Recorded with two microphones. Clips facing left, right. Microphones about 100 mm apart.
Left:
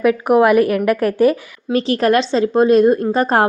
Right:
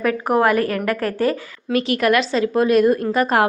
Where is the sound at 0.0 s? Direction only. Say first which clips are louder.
Left 5 dB; 15° left (ahead or behind).